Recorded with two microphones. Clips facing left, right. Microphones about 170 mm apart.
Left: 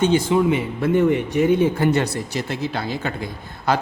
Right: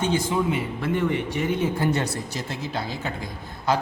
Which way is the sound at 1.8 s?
70° left (ahead or behind).